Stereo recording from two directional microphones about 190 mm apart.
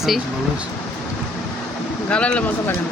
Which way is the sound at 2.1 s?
5° left (ahead or behind).